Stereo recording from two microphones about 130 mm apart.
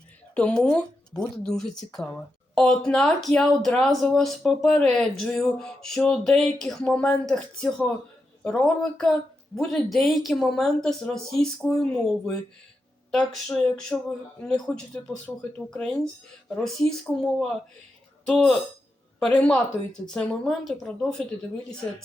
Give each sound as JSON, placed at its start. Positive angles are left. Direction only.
{"t": 0.3, "sound": "speech", "side_deg": 10}
{"t": 17.2, "sound": "speech", "side_deg": 5}